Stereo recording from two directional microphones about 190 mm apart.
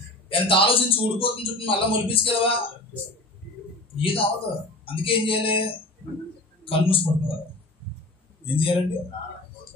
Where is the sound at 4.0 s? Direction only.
30° left (ahead or behind).